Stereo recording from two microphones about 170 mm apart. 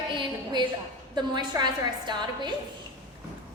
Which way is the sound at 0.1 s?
30° right (ahead or behind).